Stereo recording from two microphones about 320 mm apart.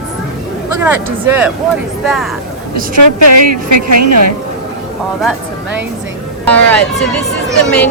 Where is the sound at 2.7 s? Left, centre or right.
Right.